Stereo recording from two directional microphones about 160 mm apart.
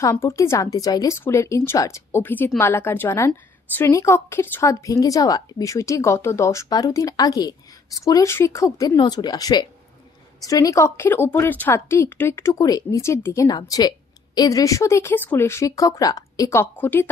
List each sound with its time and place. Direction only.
0.0 s a woman's voice: 20° left (ahead or behind)